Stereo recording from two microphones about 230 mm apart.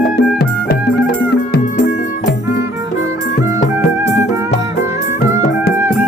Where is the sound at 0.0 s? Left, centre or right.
Left.